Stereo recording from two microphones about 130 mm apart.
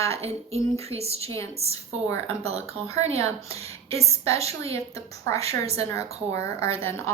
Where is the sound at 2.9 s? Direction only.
55° right (ahead or behind).